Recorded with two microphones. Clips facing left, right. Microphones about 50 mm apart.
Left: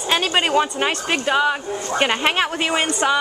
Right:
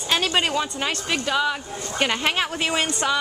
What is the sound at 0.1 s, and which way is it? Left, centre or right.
Speech, centre.